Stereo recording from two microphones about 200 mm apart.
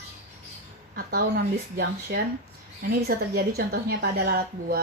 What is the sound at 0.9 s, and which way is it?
Speech, 50° right (ahead or behind).